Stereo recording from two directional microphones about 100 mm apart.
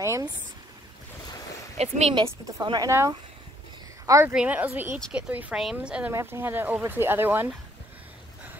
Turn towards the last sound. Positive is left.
turn(degrees=-20)  # may be behind; listen again after turning